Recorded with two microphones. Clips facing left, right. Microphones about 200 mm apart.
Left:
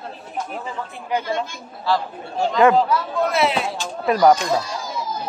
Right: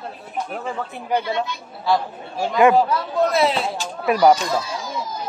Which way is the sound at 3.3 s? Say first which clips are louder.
Even; 35° right (ahead or behind).